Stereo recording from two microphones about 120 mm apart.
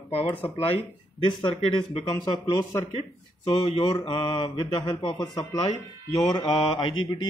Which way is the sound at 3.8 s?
45° left (ahead or behind).